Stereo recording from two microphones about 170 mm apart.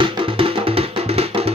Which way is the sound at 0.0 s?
30° right (ahead or behind).